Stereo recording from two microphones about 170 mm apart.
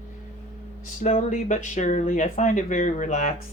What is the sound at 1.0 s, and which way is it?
Speech, 45° left (ahead or behind).